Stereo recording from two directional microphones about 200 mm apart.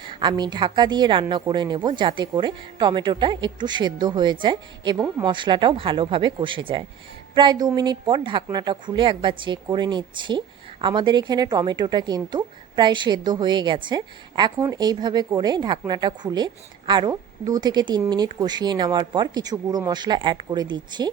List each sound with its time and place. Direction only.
0.0 s a woman's voice: 25° right (ahead or behind)